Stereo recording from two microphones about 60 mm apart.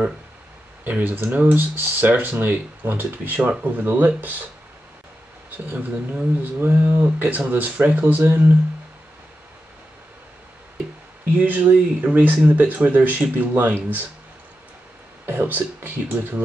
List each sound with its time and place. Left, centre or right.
0.8 s speech: right
5.7 s speech: right
11.3 s speech: right
15.2 s speech: right